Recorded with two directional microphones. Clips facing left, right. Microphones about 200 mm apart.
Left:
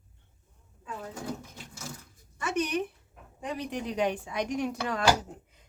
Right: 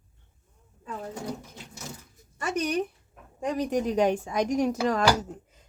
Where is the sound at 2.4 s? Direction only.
40° right (ahead or behind).